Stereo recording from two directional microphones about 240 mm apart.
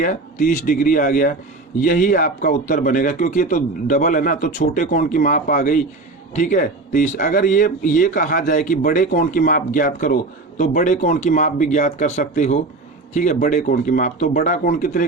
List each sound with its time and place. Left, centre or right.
0.0 s a man's voice: left